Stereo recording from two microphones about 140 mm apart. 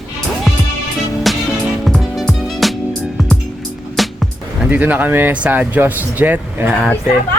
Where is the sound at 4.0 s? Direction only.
Centre (ahead or behind).